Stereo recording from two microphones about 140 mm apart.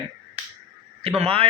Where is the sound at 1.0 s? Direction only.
45° right (ahead or behind).